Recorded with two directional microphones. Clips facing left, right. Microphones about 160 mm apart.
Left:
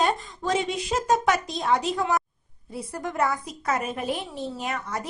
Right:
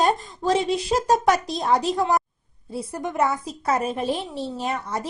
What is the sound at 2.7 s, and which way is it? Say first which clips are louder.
A woman's voice: right 3 dB; 25° right (ahead or behind).